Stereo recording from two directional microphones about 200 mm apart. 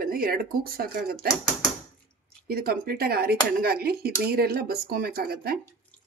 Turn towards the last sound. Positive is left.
turn(degrees=-50)  # may be behind; listen again after turning